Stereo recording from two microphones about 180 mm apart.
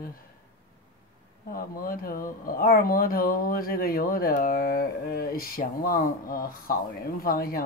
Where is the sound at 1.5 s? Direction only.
50° left (ahead or behind).